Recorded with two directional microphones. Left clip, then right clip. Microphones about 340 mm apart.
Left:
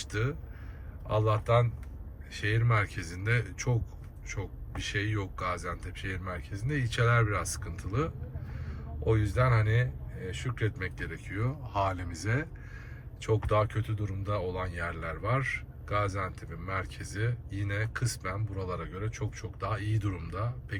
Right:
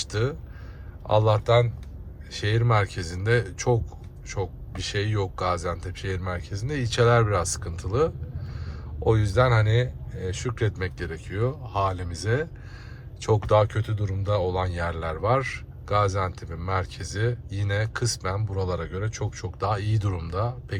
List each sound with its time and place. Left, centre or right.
0.0 s speech: centre